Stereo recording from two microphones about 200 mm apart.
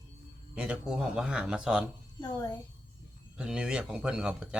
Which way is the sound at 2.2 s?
20° left (ahead or behind).